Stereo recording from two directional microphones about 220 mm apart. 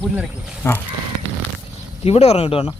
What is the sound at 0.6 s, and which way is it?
Speech, 10° left (ahead or behind).